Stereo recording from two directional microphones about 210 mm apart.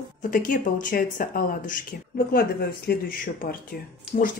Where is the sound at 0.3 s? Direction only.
40° left (ahead or behind).